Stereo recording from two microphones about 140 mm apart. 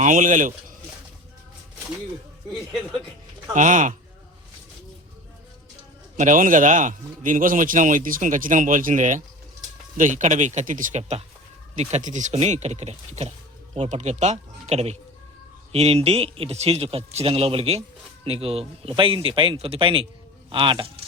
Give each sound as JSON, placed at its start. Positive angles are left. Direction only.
{"t": 0.0, "sound": "speech", "side_deg": -65}
{"t": 3.5, "sound": "speech", "side_deg": -65}
{"t": 6.1, "sound": "a man's voice", "side_deg": -65}